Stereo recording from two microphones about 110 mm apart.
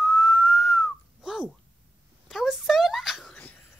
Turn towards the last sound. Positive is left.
turn(degrees=-5)  # may be behind; listen again after turning